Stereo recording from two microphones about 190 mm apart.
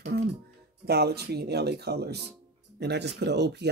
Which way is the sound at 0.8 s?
60° right (ahead or behind).